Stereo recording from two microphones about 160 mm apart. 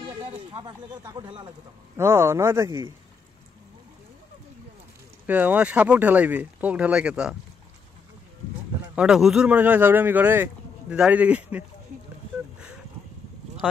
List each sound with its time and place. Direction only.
0.2 s speech: 35° right (ahead or behind)
2.0 s speech: 15° right (ahead or behind)
5.2 s speech: 10° right (ahead or behind)
8.9 s speech: 5° right (ahead or behind)